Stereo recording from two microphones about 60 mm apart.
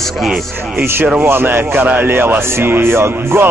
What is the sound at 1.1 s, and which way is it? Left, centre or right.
Speech, right.